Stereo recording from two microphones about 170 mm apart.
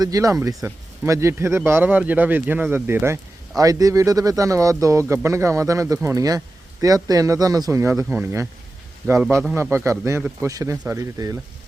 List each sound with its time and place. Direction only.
0.0 s speech: 20° right (ahead or behind)
9.6 s speech: 15° right (ahead or behind)